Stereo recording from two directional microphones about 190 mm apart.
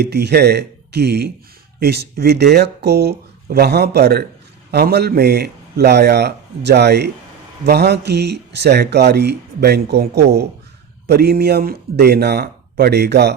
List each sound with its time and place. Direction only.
0.0 s speech: 60° right (ahead or behind)